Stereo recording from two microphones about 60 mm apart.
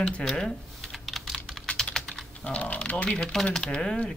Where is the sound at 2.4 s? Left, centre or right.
Left.